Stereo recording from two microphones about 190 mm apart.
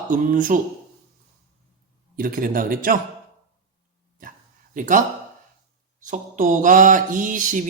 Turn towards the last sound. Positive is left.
turn(degrees=-45)  # may be behind; listen again after turning